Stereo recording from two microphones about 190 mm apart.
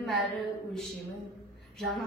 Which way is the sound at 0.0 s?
Centre (ahead or behind).